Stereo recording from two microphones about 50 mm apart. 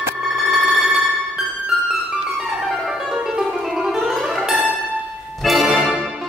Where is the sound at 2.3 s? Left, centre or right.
Centre.